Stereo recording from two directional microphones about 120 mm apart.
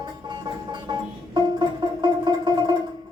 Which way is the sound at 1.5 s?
35° right (ahead or behind).